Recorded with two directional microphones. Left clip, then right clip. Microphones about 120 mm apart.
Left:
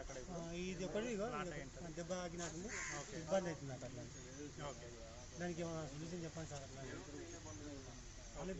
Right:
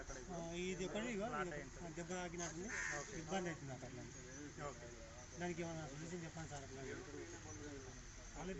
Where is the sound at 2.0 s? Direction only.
20° left (ahead or behind).